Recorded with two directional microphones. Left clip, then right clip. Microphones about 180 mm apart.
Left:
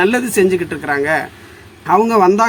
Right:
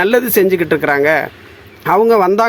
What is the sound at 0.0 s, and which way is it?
A woman's voice, 35° right (ahead or behind).